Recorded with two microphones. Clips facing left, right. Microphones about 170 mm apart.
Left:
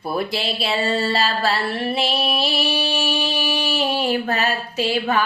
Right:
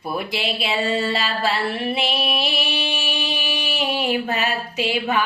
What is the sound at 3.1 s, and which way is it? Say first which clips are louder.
Music: left 4 dB; 40° left (ahead or behind).